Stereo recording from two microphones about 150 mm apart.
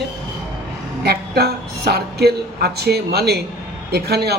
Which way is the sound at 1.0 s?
90° right.